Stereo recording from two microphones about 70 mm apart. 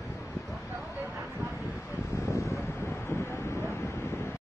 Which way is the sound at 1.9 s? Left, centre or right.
Left.